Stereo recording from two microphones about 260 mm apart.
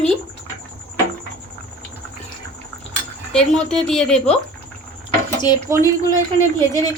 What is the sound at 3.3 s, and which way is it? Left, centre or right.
Speech, centre.